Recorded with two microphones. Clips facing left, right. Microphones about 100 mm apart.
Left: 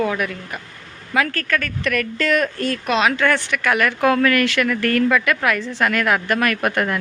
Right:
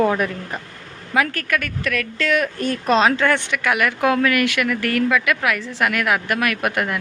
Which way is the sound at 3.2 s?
25° right (ahead or behind).